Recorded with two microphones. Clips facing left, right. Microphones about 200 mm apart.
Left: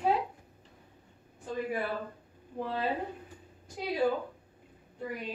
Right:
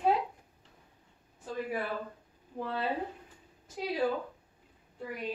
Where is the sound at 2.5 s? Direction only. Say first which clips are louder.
Left 1 dB; centre (ahead or behind).